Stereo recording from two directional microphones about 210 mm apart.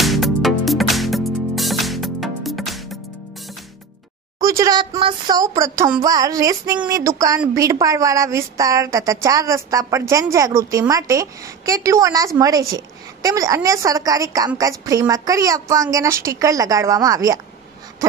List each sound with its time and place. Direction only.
0.0 s music: centre (ahead or behind)
4.4 s a sound: 15° right (ahead or behind)
4.9 s a woman's voice: 25° right (ahead or behind)